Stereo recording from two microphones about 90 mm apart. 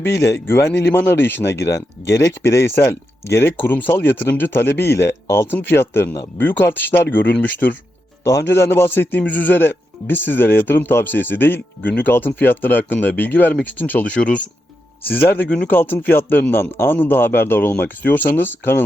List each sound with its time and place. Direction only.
0.0 s a man's voice: 30° left (ahead or behind)
8.2 s a man's voice: 35° left (ahead or behind)